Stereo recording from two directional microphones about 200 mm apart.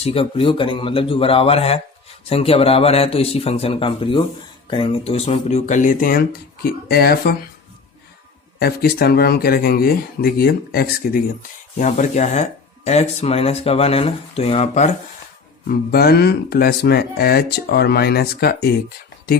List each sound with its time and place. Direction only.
0.0 s speech: 30° left (ahead or behind); by 7.3 s 50° left (ahead or behind)
8.5 s speech: 50° left (ahead or behind)
11.8 s speech: 35° left (ahead or behind)
15.6 s speech: 50° left (ahead or behind)